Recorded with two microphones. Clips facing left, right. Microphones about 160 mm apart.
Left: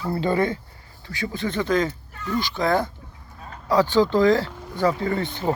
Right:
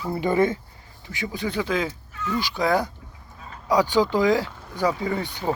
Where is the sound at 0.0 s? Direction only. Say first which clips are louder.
Right 1 dB; 15° right (ahead or behind).